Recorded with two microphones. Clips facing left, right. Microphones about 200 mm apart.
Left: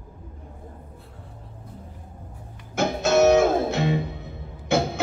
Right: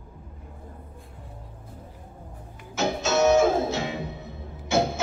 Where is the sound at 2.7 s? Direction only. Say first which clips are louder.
Left 4 dB; 55° left (ahead or behind).